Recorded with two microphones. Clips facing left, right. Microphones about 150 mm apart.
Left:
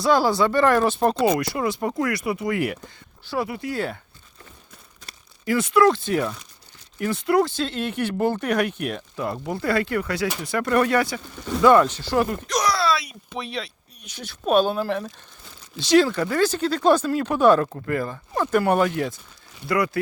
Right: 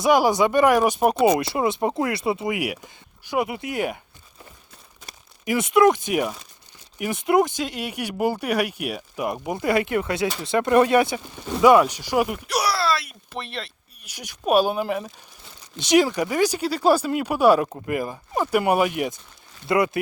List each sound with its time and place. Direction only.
0.0 s speech: 15° right (ahead or behind)
1.4 s speech: 25° right (ahead or behind)
5.0 s speech: 20° right (ahead or behind)
15.8 s speech: 15° right (ahead or behind)